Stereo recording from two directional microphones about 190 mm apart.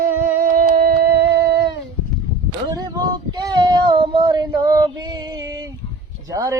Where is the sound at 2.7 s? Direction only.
20° right (ahead or behind).